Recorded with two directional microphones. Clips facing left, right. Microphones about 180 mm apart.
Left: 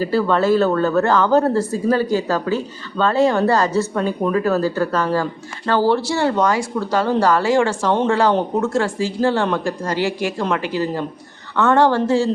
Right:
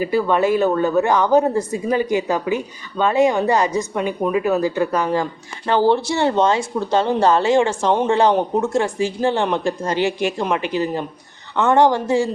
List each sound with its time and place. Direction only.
0.0 s speech: 15° right (ahead or behind)